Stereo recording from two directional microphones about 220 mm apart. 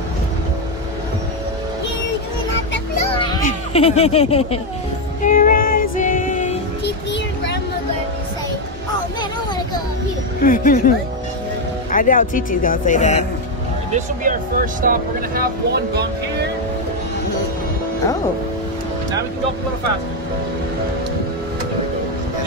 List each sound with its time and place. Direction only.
3.4 s speech: 30° left (ahead or behind)
5.2 s music: 40° left (ahead or behind)
6.8 s music: 50° left (ahead or behind)
10.4 s speech: 40° left (ahead or behind)
11.9 s speech: 40° left (ahead or behind)
13.9 s speech: 35° right (ahead or behind)